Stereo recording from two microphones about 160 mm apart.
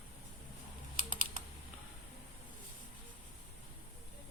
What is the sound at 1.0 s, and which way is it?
Typing, 60° right (ahead or behind).